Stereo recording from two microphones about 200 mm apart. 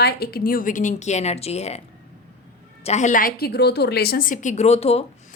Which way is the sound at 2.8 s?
35° left (ahead or behind).